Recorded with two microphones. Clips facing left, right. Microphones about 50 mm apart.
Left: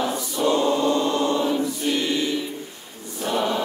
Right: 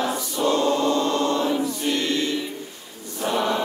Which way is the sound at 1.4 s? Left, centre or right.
Centre.